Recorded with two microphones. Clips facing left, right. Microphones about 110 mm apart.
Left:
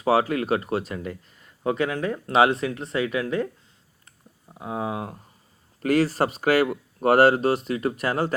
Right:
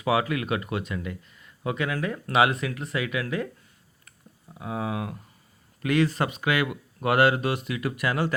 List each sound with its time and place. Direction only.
0.0 s speech: 35° left (ahead or behind)
4.0 s a sound: 30° left (ahead or behind)
5.8 s speech: 40° left (ahead or behind)